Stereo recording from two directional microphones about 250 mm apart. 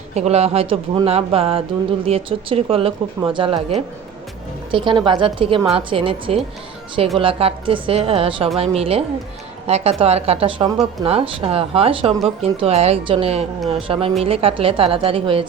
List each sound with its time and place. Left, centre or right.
0.1 s speech: right
4.7 s speech: centre